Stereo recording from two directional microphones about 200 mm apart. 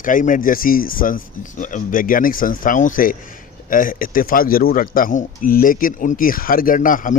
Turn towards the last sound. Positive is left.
turn(degrees=40)  # may be behind; listen again after turning